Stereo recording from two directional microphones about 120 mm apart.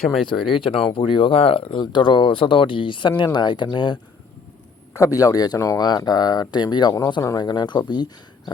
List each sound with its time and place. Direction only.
0.5 s speech: 45° left (ahead or behind)
4.9 s speech: 30° left (ahead or behind)